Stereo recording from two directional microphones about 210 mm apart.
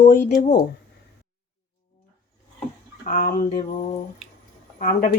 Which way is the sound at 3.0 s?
40° left (ahead or behind).